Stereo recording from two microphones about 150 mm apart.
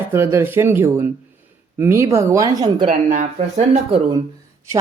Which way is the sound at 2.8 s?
50° right (ahead or behind).